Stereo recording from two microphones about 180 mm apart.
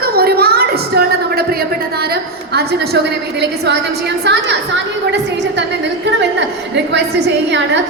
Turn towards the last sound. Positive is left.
turn(degrees=-75)  # may be behind; listen again after turning